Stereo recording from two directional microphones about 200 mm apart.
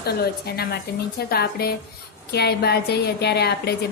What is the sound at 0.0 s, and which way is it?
Speech, 50° left (ahead or behind).